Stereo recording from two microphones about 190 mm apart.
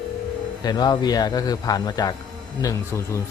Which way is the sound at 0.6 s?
20° left (ahead or behind).